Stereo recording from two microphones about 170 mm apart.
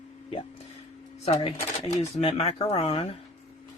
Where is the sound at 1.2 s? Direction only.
40° left (ahead or behind).